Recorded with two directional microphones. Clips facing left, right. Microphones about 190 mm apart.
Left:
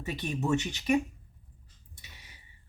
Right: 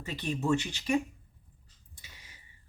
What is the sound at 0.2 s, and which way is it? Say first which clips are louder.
Speech: right 1 dB; 20° left (ahead or behind).